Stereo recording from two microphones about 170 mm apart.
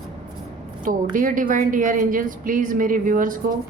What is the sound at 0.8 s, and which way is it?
A woman's voice, 50° right (ahead or behind).